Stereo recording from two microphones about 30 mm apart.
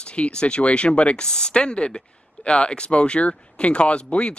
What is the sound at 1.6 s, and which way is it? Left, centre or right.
Speech, left.